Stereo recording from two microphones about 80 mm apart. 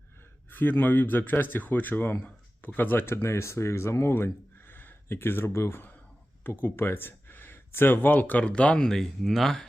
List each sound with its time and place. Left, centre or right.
0.5 s speech: left; by 9.6 s centre